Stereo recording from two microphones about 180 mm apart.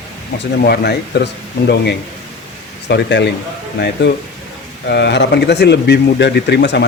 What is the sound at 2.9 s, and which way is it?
Speech, 75° left (ahead or behind).